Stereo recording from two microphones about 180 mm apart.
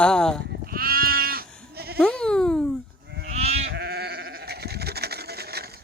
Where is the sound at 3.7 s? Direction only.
65° right (ahead or behind).